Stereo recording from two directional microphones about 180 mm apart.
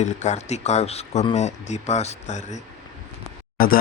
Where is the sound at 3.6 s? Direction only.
55° left (ahead or behind).